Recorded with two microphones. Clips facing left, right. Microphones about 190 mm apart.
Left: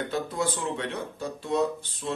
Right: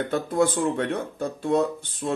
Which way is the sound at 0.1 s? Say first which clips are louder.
Right 6 dB; 50° right (ahead or behind).